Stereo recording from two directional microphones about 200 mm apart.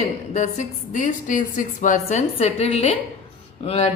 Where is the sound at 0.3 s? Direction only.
35° left (ahead or behind).